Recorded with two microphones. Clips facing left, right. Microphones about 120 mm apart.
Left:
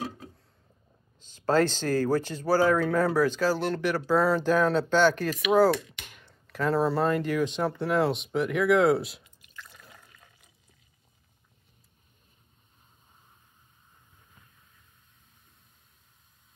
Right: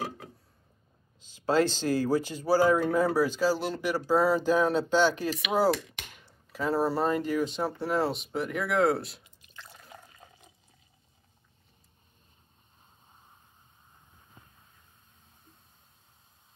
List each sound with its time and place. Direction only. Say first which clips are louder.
1.8 s speech: left 1 dB; 45° left (ahead or behind)
2.2 s speech: even; 10° right (ahead or behind)
9.2 s drip: left 1 dB; 25° right (ahead or behind)
14.4 s vehicle: right 5 dB; 30° right (ahead or behind)